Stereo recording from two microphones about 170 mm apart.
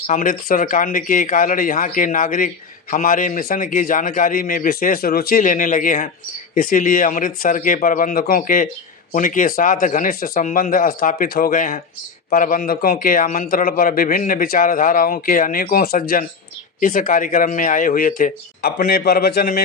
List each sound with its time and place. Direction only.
0.1 s a man's voice: 55° left (ahead or behind)